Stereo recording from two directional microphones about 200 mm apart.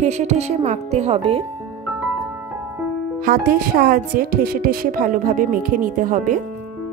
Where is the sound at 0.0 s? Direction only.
35° right (ahead or behind).